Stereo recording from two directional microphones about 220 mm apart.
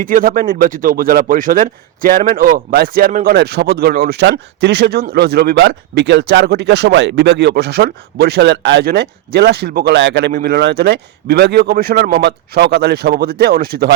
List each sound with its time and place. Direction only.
0.0 s speech: 40° right (ahead or behind)